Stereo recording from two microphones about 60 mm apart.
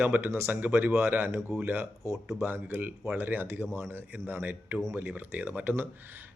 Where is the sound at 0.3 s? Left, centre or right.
Right.